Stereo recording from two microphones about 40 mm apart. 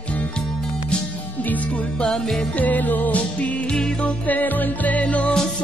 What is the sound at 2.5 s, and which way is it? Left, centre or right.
Music, left.